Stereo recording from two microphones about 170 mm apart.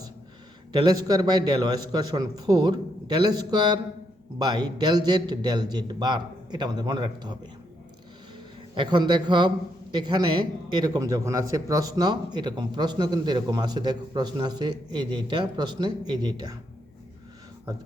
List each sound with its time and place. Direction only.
0.7 s a man's voice: 25° right (ahead or behind)
8.7 s a man's voice: 30° right (ahead or behind)